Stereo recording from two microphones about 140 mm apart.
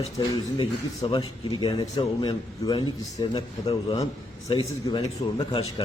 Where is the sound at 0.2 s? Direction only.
35° left (ahead or behind).